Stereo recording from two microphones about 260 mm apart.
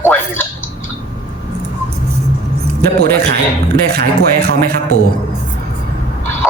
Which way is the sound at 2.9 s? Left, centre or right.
Right.